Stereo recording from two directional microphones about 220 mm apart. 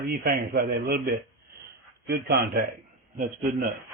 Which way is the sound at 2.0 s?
45° right (ahead or behind).